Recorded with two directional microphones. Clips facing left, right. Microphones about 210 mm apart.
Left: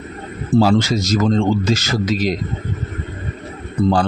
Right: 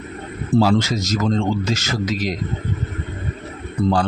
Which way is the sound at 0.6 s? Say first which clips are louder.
Left 3 dB; 30° left (ahead or behind).